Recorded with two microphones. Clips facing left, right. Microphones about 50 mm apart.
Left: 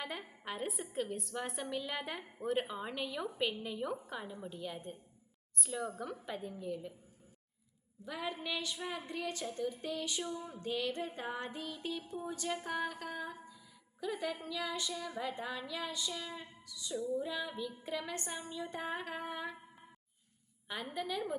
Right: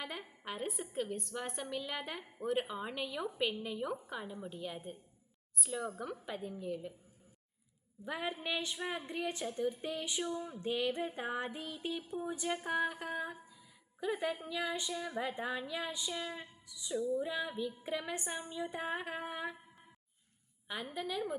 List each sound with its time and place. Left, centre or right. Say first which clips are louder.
0.0 s a woman's voice: left 1 dB; centre
8.0 s a sound: right 2 dB; centre
20.9 s a woman's voice: even; centre